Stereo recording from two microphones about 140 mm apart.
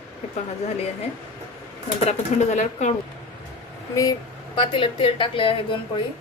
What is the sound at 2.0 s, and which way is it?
Speech, 55° left (ahead or behind).